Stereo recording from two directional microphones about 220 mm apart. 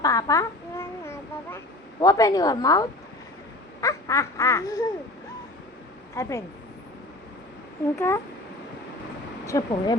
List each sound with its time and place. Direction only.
0.0 s a sound: 15° left (ahead or behind)
3.8 s quack: 15° left (ahead or behind)
6.1 s quack: 10° left (ahead or behind)
7.9 s quack: 10° left (ahead or behind)
9.5 s quack: 15° left (ahead or behind)